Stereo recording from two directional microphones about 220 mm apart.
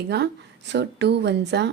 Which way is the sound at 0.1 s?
50° right (ahead or behind).